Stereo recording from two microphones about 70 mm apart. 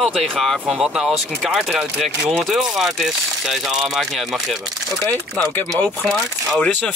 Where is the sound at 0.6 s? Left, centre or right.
Centre.